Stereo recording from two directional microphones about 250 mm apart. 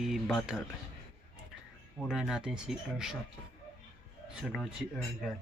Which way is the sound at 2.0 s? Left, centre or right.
Centre.